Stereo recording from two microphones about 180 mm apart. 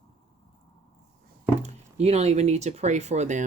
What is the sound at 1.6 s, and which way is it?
Speech, 35° right (ahead or behind).